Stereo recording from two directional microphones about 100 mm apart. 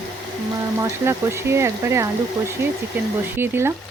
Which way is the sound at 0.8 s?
25° right (ahead or behind).